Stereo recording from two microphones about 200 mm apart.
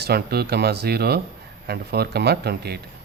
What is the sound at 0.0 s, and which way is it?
Speech, 50° right (ahead or behind).